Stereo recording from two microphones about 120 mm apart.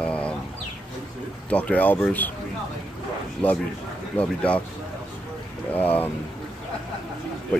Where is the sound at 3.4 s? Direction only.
10° left (ahead or behind).